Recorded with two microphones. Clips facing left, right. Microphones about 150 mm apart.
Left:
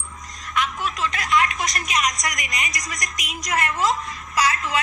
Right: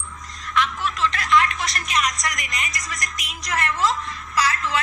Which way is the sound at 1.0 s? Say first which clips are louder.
Right 2 dB; 15° left (ahead or behind).